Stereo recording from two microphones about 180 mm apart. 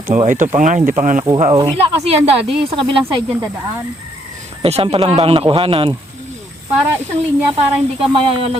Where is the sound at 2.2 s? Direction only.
35° right (ahead or behind).